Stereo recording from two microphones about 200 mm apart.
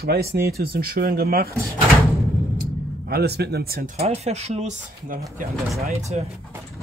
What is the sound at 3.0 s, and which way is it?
Speech, 55° right (ahead or behind).